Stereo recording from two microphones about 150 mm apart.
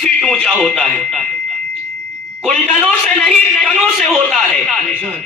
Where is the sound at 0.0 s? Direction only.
5° left (ahead or behind).